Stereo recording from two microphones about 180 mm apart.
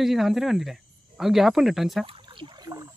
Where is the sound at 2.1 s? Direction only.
25° right (ahead or behind).